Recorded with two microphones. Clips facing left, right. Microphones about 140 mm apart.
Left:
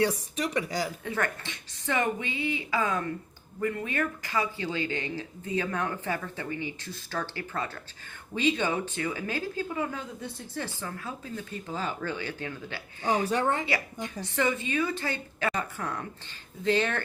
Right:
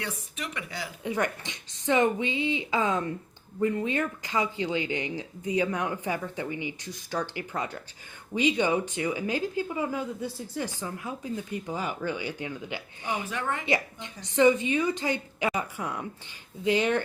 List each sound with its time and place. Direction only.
0.0 s speech: 35° left (ahead or behind)
1.0 s a woman's voice: 15° right (ahead or behind)
13.1 s speech: 35° left (ahead or behind)
13.7 s speech: 20° right (ahead or behind)